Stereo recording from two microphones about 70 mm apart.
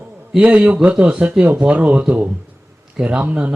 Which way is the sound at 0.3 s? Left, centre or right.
Centre.